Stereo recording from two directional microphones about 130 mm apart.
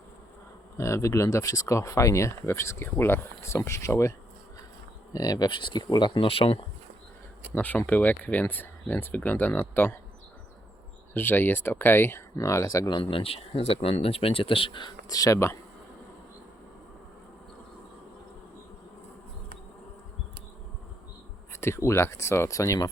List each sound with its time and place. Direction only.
0.8 s speech: 20° left (ahead or behind)
5.1 s speech: 30° left (ahead or behind); by 6.6 s 45° left (ahead or behind)
7.5 s speech: 10° left (ahead or behind)
11.1 s speech: 15° left (ahead or behind)
13.0 s speech: 40° left (ahead or behind)
15.1 s speech: 25° left (ahead or behind)
21.5 s speech: 20° left (ahead or behind)